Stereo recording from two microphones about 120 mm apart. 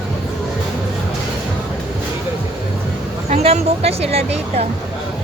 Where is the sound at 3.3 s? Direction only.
60° right (ahead or behind).